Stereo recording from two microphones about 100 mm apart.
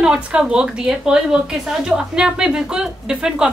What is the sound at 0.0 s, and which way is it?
A woman's voice, 10° right (ahead or behind).